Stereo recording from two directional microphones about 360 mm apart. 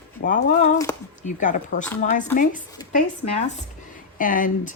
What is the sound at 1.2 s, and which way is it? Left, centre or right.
Speech, left.